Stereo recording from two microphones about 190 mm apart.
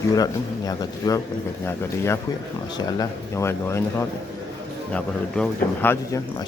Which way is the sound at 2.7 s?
15° left (ahead or behind).